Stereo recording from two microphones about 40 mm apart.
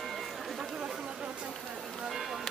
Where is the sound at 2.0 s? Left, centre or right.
Centre.